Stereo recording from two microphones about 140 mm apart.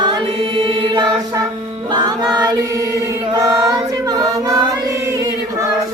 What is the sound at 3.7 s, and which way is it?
Choir, 25° right (ahead or behind).